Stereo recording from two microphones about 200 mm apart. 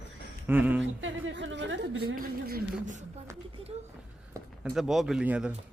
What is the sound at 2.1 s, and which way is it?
Speech, 50° right (ahead or behind).